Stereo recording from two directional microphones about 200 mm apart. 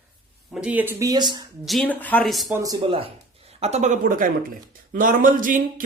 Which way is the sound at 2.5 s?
15° right (ahead or behind).